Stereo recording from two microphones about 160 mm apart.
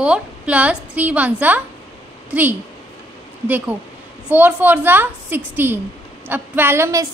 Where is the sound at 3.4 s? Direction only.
10° right (ahead or behind).